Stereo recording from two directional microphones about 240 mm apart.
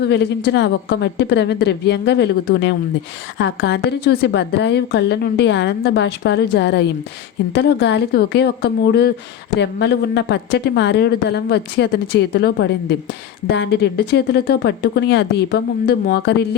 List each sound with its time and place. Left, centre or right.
0.0 s speech: left